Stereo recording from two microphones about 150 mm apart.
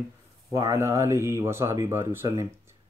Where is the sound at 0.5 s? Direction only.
25° right (ahead or behind).